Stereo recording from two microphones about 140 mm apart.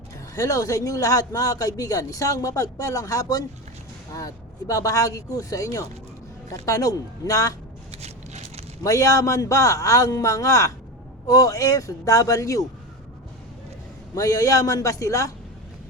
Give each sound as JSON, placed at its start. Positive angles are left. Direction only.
{"t": 0.3, "sound": "speech", "side_deg": 25}
{"t": 7.9, "sound": "a sound", "side_deg": -50}
{"t": 8.8, "sound": "speech", "side_deg": 20}
{"t": 14.2, "sound": "speech", "side_deg": 25}